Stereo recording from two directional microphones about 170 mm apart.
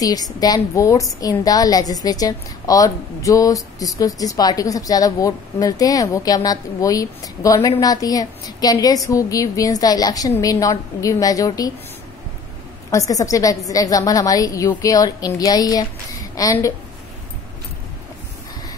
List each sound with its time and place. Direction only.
0.0 s a woman's voice: 20° left (ahead or behind)
12.9 s a woman's voice: 20° left (ahead or behind)